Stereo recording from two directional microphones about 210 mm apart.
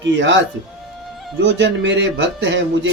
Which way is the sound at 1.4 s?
60° right (ahead or behind).